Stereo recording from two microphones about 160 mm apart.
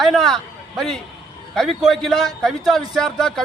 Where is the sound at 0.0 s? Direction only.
Centre (ahead or behind).